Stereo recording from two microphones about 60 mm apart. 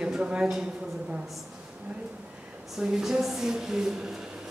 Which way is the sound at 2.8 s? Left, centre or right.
Centre.